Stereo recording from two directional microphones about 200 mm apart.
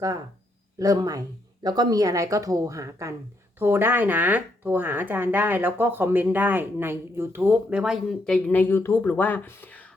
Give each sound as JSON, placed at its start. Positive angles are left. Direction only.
{"t": 0.8, "sound": "speech", "side_deg": -15}